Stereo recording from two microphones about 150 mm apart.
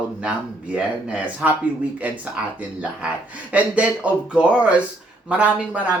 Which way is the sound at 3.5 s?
10° right (ahead or behind).